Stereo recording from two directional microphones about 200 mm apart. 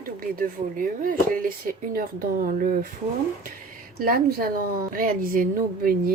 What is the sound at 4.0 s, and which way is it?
A woman's voice, 45° right (ahead or behind).